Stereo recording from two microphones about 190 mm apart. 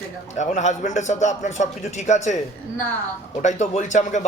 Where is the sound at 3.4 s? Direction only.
40° left (ahead or behind).